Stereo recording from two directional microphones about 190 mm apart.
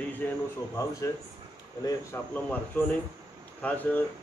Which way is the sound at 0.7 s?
15° left (ahead or behind).